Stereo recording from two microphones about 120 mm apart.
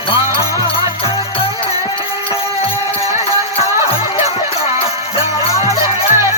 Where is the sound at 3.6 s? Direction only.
50° left (ahead or behind).